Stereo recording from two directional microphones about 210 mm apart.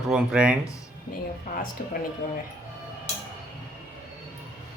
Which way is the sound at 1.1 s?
40° left (ahead or behind).